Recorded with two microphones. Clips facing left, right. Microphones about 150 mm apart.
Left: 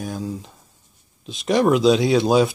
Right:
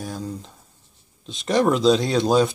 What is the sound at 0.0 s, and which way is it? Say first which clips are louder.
Speech: left 3 dB; centre (ahead or behind).